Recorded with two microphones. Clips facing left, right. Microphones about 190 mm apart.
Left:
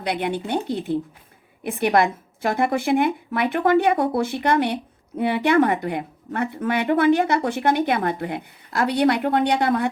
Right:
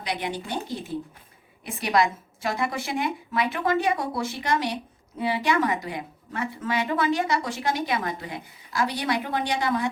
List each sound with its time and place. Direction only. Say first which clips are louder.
0.0 s a woman's voice: left 6 dB; 60° left (ahead or behind)